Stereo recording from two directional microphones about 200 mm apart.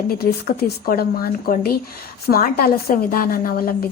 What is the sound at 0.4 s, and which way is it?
A woman's voice, 50° left (ahead or behind).